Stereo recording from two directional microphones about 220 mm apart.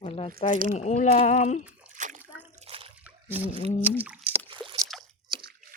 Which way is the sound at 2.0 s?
35° right (ahead or behind).